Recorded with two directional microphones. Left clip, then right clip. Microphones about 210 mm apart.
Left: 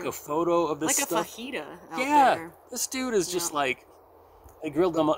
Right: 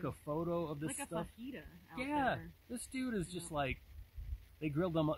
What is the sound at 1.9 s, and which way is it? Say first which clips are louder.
Speech: left 16 dB; 15° right (ahead or behind).